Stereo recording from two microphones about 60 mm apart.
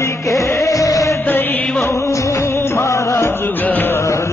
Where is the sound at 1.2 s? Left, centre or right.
Left.